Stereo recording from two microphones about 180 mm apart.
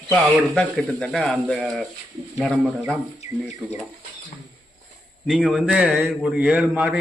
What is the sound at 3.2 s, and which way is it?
Speech, 40° left (ahead or behind).